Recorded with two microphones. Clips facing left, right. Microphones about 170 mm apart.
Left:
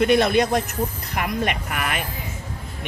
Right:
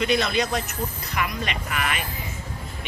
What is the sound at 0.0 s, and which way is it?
A woman's voice, 55° left (ahead or behind).